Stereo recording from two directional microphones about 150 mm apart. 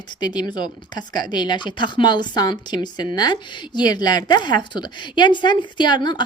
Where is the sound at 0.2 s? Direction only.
25° left (ahead or behind).